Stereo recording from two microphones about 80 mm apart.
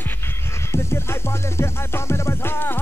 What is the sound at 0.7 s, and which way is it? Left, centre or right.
Music, left.